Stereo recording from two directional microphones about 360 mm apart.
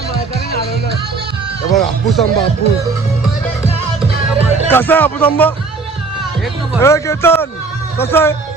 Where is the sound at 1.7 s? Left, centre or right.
Centre.